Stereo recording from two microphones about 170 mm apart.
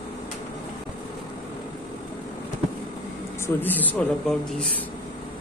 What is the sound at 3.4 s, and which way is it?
Speech, 10° left (ahead or behind).